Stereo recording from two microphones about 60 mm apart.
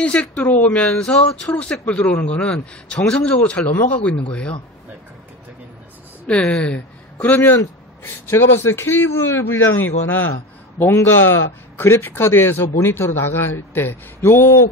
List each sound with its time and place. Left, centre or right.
0.0 s speech: left
6.2 s a man's voice: centre; by 9.1 s left
9.1 s a man's voice: left
9.4 s a man's voice: left